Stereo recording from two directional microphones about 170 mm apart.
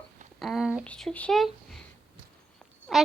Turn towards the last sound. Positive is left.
turn(degrees=0)  # may be behind; listen again after turning